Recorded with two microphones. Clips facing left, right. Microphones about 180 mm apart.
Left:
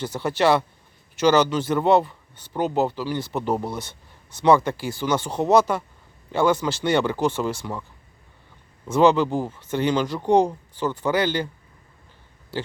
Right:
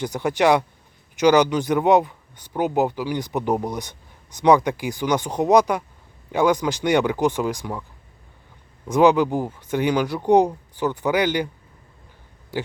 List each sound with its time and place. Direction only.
0.0 s speech: 15° right (ahead or behind)
8.9 s speech: 15° right (ahead or behind)